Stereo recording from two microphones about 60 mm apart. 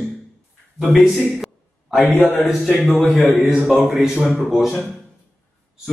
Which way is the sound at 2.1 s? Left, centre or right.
Left.